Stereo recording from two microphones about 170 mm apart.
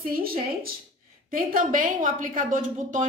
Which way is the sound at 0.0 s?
60° right (ahead or behind).